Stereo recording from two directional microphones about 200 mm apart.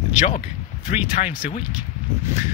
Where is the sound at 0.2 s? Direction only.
40° left (ahead or behind).